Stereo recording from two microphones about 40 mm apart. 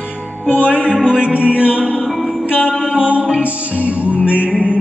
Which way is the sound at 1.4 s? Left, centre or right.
Left.